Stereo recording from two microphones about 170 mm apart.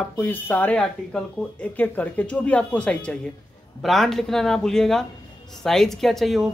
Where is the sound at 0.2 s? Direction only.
10° left (ahead or behind).